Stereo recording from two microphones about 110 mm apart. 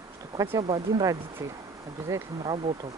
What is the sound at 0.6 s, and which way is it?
Speech, 45° right (ahead or behind).